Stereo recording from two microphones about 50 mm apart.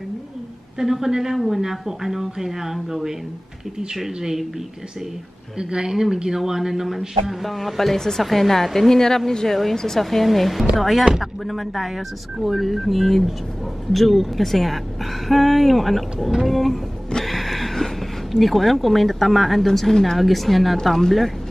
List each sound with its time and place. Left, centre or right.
0.7 s speech: centre
5.6 s speech: centre